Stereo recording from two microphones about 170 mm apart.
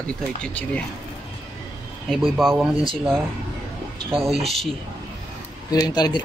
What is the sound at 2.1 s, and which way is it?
Speech, centre (ahead or behind).